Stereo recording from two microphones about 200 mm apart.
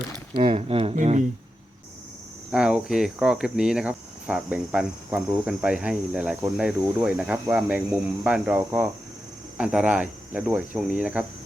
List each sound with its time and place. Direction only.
0.3 s speech: 30° right (ahead or behind)
2.5 s speech: 5° right (ahead or behind)